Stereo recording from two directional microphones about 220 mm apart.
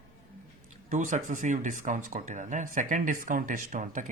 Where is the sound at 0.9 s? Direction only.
35° right (ahead or behind).